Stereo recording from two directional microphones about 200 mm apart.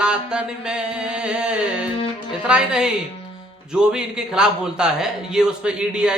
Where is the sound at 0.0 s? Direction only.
5° right (ahead or behind).